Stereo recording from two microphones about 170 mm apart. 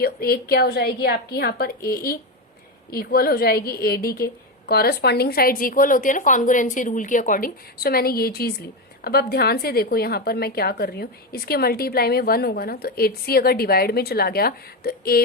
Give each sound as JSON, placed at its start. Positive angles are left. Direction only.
{"t": 0.0, "sound": "a woman's voice", "side_deg": 65}